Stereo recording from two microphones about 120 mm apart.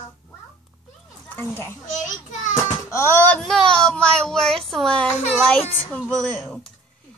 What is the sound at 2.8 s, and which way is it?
Speech, 20° left (ahead or behind).